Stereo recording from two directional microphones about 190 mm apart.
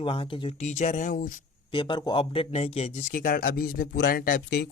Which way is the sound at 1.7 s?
25° left (ahead or behind).